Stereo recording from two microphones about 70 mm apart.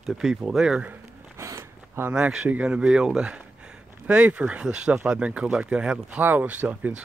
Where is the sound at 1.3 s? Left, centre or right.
Right.